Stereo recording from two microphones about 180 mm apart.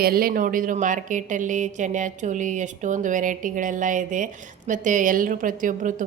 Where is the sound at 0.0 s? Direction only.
55° right (ahead or behind).